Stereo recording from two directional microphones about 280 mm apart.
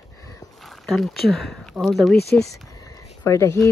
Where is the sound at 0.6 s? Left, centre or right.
Centre.